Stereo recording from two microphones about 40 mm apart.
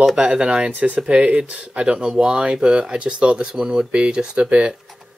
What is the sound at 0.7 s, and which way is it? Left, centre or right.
Speech, right.